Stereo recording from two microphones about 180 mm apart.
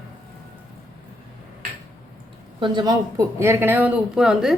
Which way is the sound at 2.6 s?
25° right (ahead or behind).